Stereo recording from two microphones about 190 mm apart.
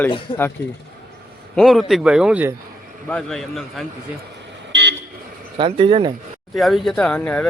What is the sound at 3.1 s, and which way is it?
Speech, 5° left (ahead or behind).